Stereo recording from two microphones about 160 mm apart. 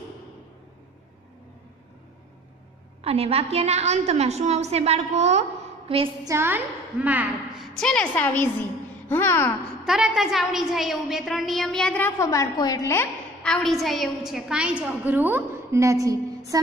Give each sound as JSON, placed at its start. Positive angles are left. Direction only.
{"t": 3.0, "sound": "a woman's voice", "side_deg": -40}
{"t": 5.9, "sound": "a sound", "side_deg": -35}
{"t": 6.2, "sound": "a woman's voice", "side_deg": -15}
{"t": 7.7, "sound": "a woman's voice", "side_deg": 5}
{"t": 9.8, "sound": "a woman's voice", "side_deg": -5}